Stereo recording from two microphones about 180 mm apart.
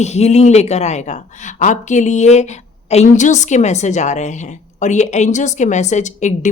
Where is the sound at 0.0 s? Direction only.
40° left (ahead or behind).